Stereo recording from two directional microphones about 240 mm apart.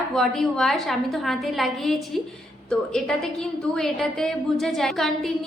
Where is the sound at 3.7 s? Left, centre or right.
Centre.